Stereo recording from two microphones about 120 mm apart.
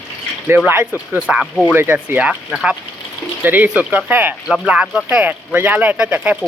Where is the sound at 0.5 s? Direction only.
10° right (ahead or behind).